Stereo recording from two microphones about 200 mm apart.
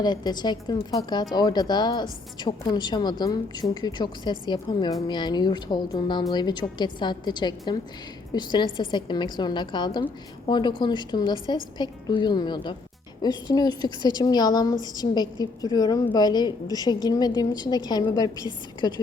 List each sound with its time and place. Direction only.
0.0 s a woman's voice: 20° left (ahead or behind)